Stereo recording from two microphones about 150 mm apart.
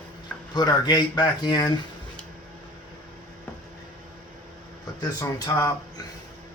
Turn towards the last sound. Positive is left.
turn(degrees=20)  # may be behind; listen again after turning